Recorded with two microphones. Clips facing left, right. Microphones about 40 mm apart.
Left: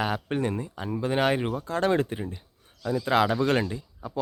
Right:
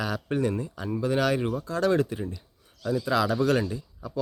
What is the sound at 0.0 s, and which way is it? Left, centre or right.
Speech, left.